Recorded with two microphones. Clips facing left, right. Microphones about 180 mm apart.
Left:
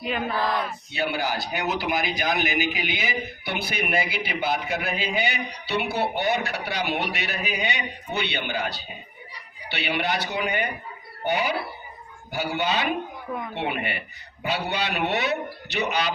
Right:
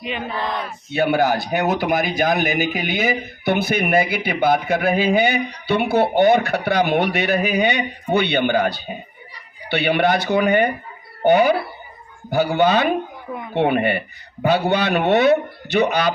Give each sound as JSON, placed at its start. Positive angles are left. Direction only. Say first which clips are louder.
{"t": 0.0, "sound": "speech", "louder": "even", "side_deg": 5}
{"t": 0.9, "sound": "speech", "louder": "right 9 dB", "side_deg": -55}